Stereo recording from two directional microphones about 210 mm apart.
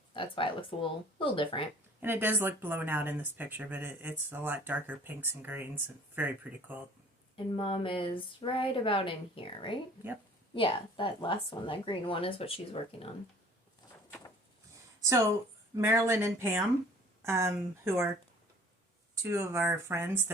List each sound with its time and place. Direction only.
0.1 s a woman's voice: 25° left (ahead or behind)
2.0 s speech: 10° right (ahead or behind)
7.3 s a woman's voice: 25° left (ahead or behind)
15.7 s speech: 15° right (ahead or behind)
19.1 s speech: 10° right (ahead or behind)